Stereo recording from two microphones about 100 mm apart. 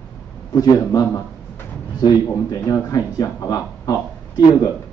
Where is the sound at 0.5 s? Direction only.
35° left (ahead or behind).